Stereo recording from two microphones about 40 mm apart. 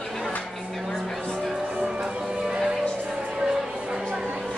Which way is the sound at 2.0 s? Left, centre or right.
Centre.